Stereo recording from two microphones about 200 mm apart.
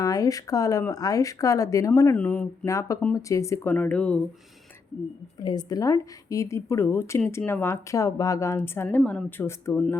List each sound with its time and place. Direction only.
0.0 s speech: 20° left (ahead or behind)
5.4 s speech: 20° left (ahead or behind)